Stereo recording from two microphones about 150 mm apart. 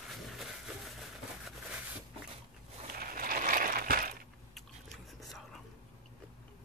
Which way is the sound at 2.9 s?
70° right (ahead or behind).